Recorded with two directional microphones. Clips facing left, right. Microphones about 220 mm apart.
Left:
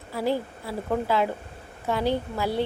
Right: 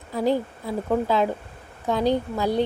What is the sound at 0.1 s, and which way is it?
A woman's voice, 15° right (ahead or behind).